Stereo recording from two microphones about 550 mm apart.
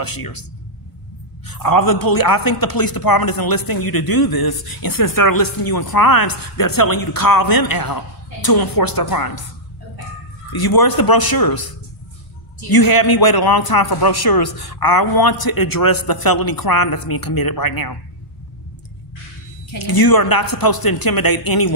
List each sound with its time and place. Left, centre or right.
0.0 s a man's voice: left
10.5 s a man's voice: left
19.8 s a man's voice: left